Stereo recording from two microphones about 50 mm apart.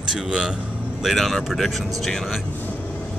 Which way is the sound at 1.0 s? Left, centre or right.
Centre.